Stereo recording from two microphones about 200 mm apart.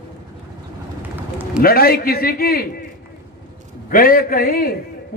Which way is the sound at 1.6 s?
50° left (ahead or behind).